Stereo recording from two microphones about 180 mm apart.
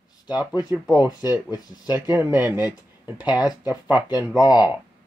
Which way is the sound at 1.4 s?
20° left (ahead or behind).